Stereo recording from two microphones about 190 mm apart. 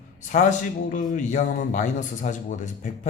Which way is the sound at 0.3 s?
45° left (ahead or behind).